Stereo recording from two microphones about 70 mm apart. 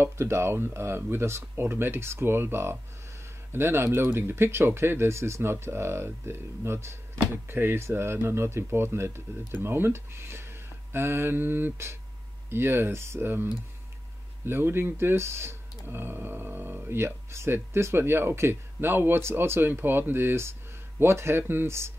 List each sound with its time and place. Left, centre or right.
0.0 s speech: right